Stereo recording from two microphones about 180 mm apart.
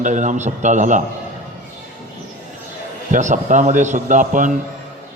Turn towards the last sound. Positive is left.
turn(degrees=-45)  # may be behind; listen again after turning